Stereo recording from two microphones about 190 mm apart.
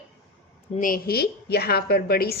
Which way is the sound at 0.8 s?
50° left (ahead or behind).